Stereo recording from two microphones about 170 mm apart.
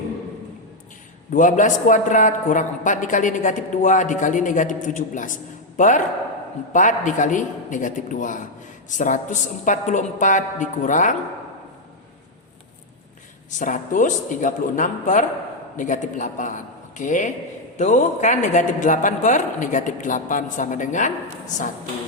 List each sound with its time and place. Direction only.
1.3 s a man's voice: 50° left (ahead or behind)
13.5 s a man's voice: 50° left (ahead or behind)